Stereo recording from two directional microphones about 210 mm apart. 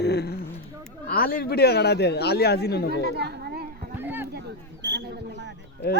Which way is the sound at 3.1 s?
50° right (ahead or behind).